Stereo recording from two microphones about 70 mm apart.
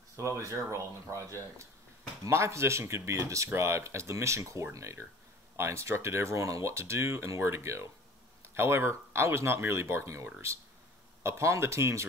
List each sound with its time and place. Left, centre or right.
0.1 s a sound: right
0.7 s speech: right
11.2 s speech: right